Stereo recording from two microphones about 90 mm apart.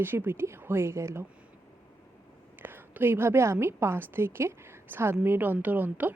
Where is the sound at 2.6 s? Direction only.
20° right (ahead or behind).